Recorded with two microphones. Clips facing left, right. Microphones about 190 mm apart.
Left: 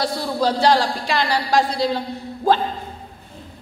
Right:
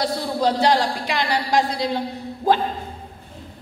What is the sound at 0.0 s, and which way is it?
A woman's voice, 20° right (ahead or behind).